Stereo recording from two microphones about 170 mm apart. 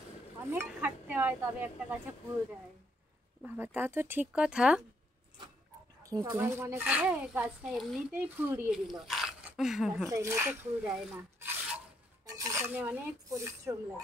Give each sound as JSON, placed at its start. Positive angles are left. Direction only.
{"t": 0.5, "sound": "speech", "side_deg": -10}
{"t": 3.4, "sound": "speech", "side_deg": -10}
{"t": 6.0, "sound": "speech", "side_deg": -20}
{"t": 10.0, "sound": "speech", "side_deg": -20}
{"t": 12.3, "sound": "speech", "side_deg": -20}